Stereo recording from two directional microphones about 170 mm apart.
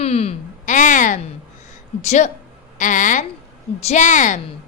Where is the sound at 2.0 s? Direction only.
45° left (ahead or behind).